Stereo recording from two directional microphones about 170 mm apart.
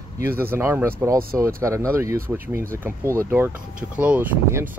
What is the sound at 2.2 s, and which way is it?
Speech, 55° right (ahead or behind).